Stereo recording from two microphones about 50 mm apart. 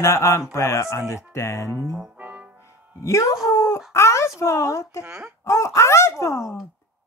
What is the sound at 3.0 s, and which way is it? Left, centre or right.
Speech, left.